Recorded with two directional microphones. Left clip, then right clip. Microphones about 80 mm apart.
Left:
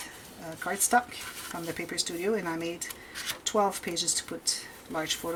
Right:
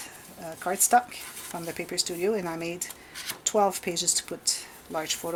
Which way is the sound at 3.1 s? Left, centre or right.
Centre.